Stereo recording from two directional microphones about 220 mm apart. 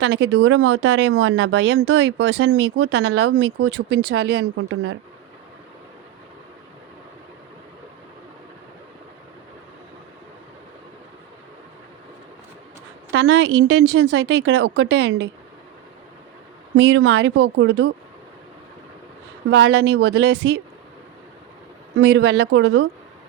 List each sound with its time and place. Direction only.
0.0 s speech: 55° right (ahead or behind)
13.1 s speech: 50° right (ahead or behind)
16.7 s speech: 55° right (ahead or behind)
19.5 s speech: 50° right (ahead or behind)
21.9 s speech: 50° right (ahead or behind)